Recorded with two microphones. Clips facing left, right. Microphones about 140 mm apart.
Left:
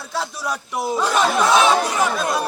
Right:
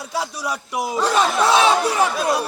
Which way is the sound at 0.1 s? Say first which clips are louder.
Even; 10° right (ahead or behind).